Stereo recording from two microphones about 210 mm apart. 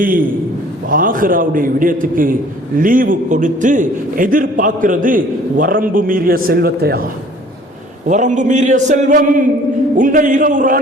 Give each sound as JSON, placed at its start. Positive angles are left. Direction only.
{"t": 0.0, "sound": "a man's voice", "side_deg": -40}
{"t": 8.0, "sound": "a man's voice", "side_deg": -35}